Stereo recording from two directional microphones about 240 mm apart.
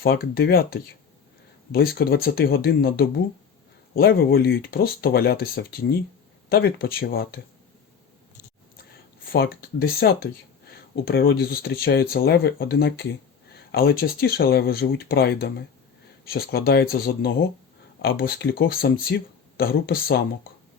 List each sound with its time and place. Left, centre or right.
0.0 s speech: left
2.0 s speech: left
9.3 s speech: left